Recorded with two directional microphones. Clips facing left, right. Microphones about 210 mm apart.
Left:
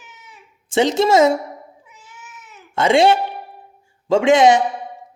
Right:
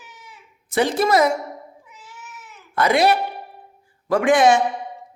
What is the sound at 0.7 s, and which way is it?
Speech, 25° left (ahead or behind).